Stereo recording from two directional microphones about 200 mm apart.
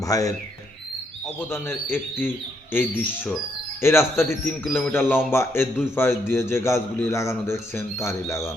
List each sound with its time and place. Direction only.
0.1 s a man's voice: 15° left (ahead or behind)
1.4 s a man's voice: 10° left (ahead or behind)